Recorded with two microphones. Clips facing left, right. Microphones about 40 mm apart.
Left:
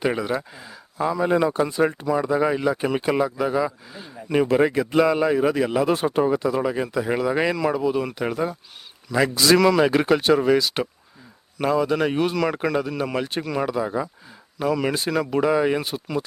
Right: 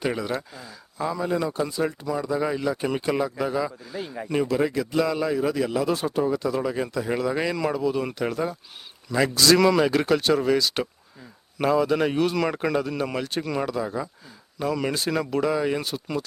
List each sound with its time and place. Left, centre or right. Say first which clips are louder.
0.0 s a man's voice: left 3 dB; centre
1.3 s a man's voice: left 5 dB; left; by 3.9 s centre
4.4 s speech: left 5 dB; left
6.4 s a man's voice: left 3 dB; centre
7.5 s speech: left 3 dB; centre
7.8 s a man's voice: left 2 dB; centre
9.6 s speech: left 4 dB; centre
9.8 s a man's voice: left 3 dB; centre
13.7 s a man's voice: left 3 dB; centre
15.3 s speech: left 5 dB; centre